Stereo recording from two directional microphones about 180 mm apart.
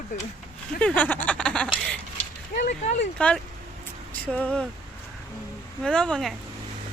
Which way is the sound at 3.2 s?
5° left (ahead or behind).